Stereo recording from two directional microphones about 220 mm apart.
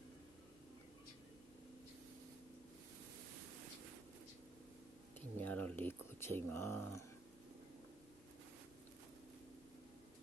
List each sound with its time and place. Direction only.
5.4 s speech: 10° left (ahead or behind)